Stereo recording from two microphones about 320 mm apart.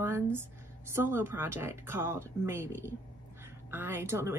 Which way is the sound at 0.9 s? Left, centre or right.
Centre.